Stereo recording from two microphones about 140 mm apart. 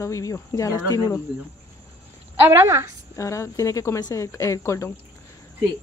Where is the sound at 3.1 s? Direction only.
20° left (ahead or behind).